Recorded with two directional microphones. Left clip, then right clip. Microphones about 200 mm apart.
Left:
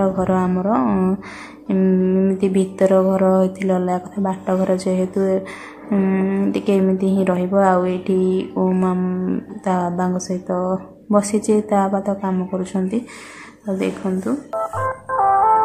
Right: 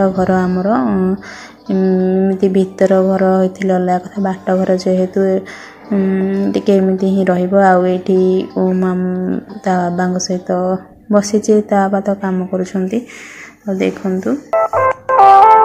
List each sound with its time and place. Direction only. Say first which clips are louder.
0.0 s a woman's voice: right 5 dB; 15° right (ahead or behind)
14.6 s music: right 12 dB; 35° right (ahead or behind)